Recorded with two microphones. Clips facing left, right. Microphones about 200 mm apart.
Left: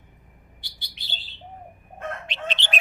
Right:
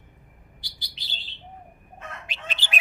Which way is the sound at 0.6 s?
60° left (ahead or behind).